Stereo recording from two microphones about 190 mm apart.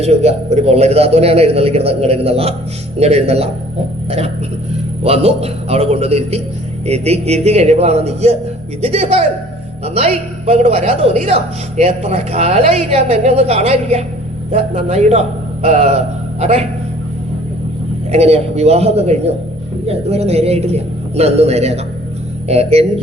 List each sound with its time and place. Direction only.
0.0 s a man's voice: 35° right (ahead or behind)
5.0 s a man's voice: 30° right (ahead or behind)
18.1 s a man's voice: 35° right (ahead or behind)